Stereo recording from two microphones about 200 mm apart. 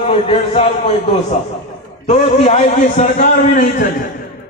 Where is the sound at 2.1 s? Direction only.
35° left (ahead or behind).